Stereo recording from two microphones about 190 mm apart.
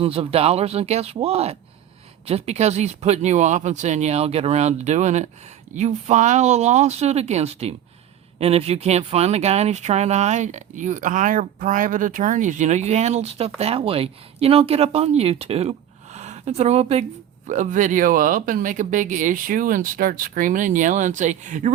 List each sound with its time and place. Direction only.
0.0 s speech: 30° right (ahead or behind)